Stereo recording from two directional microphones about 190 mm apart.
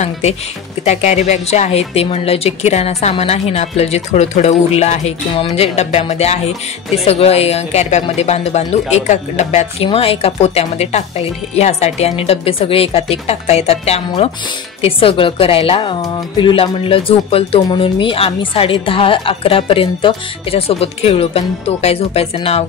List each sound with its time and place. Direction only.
0.0 s a woman's voice: 35° left (ahead or behind)